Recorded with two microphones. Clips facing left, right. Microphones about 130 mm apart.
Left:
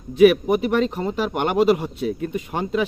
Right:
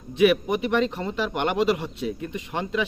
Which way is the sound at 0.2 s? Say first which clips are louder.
Left 5 dB; 45° left (ahead or behind).